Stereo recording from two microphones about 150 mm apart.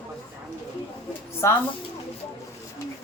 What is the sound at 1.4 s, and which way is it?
Speech, 20° left (ahead or behind).